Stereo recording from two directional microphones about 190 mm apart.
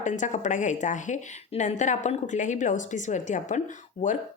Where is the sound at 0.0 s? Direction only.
40° left (ahead or behind).